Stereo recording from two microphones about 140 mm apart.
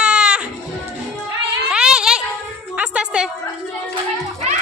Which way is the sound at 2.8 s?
10° right (ahead or behind).